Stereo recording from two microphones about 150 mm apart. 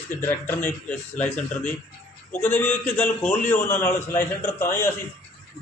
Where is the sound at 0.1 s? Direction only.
15° left (ahead or behind).